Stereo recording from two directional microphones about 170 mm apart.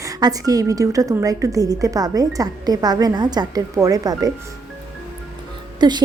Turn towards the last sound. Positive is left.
turn(degrees=-25)  # may be behind; listen again after turning